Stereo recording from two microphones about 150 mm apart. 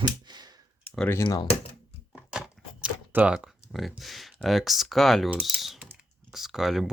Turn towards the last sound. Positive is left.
turn(degrees=0)  # may be behind; listen again after turning